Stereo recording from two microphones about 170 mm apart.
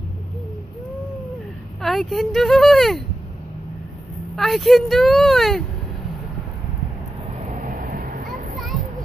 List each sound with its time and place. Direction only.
1.8 s speech: centre (ahead or behind)
4.4 s speech: centre (ahead or behind)
7.5 s vehicle: 55° right (ahead or behind)